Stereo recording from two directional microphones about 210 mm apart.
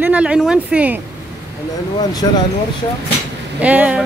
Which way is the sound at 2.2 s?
20° left (ahead or behind).